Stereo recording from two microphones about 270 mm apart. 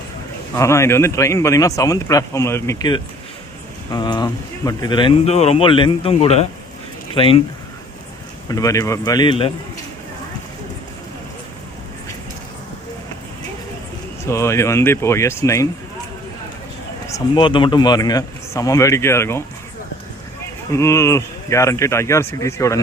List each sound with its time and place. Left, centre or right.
0.5 s speech: centre
8.4 s speech: centre
14.3 s speech: centre
17.1 s speech: centre
20.7 s speech: centre